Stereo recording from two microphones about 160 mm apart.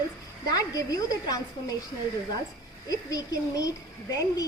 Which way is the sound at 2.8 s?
20° left (ahead or behind).